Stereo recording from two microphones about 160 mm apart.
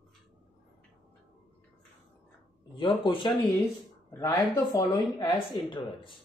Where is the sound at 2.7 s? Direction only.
30° left (ahead or behind).